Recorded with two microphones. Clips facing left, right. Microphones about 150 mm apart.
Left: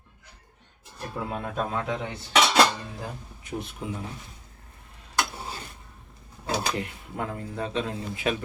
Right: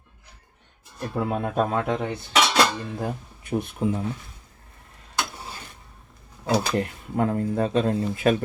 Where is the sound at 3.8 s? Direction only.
40° right (ahead or behind).